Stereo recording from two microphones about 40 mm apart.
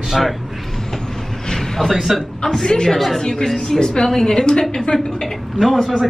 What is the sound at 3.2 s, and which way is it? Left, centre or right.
A woman's voice, centre.